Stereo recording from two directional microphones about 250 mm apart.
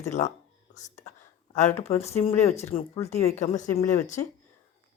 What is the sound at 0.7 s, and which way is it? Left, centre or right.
Whispering, left.